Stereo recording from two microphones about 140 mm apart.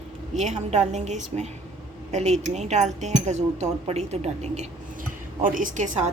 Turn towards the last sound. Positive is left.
turn(degrees=-65)  # may be behind; listen again after turning